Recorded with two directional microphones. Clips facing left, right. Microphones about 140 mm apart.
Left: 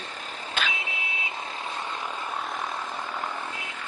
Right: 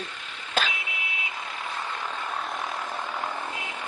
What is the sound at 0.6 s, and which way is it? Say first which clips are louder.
Vehicle: right 3 dB; 40° right (ahead or behind).